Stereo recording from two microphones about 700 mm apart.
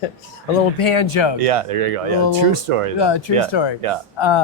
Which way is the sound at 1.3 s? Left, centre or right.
Right.